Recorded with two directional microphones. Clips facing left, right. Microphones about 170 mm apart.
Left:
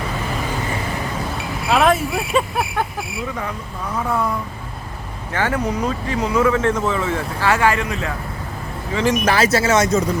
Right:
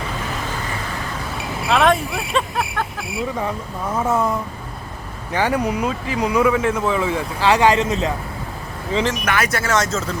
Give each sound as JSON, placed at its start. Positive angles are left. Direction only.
{"t": 1.4, "sound": "a sound", "side_deg": 0}
{"t": 3.9, "sound": "speech", "side_deg": -20}
{"t": 9.2, "sound": "speech", "side_deg": 30}